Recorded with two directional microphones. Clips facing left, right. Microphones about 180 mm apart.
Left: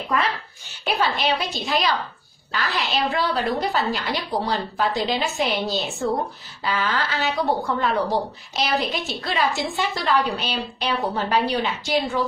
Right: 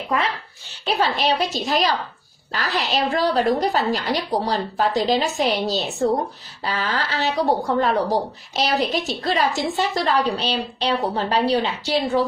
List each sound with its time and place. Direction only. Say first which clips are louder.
0.8 s a woman's voice: right 2 dB; 35° right (ahead or behind)